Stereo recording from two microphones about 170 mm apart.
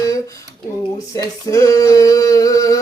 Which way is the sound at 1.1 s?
20° left (ahead or behind).